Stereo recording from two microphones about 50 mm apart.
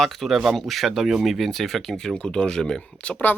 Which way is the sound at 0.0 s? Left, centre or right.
Centre.